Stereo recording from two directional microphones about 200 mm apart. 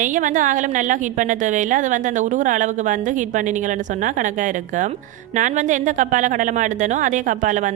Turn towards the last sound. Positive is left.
turn(degrees=-40)  # may be behind; listen again after turning